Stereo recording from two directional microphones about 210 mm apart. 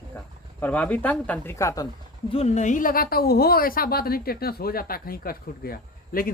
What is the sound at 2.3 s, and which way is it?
A woman's voice, 30° left (ahead or behind).